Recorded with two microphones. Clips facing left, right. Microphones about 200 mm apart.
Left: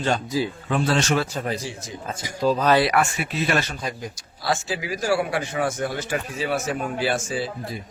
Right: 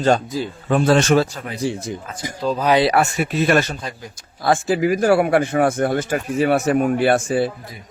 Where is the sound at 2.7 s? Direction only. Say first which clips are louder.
Right 4 dB; 30° right (ahead or behind).